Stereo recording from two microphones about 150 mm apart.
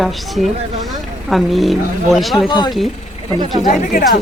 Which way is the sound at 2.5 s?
30° left (ahead or behind).